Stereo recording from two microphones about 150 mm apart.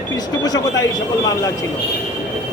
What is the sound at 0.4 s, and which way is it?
A man's voice, 25° left (ahead or behind).